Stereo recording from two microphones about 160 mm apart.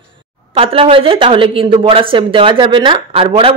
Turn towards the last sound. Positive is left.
turn(degrees=-35)  # may be behind; listen again after turning